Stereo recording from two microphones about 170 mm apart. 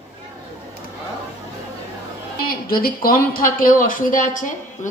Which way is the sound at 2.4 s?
60° left (ahead or behind).